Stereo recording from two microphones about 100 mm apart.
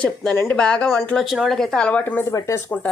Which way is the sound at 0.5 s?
10° left (ahead or behind).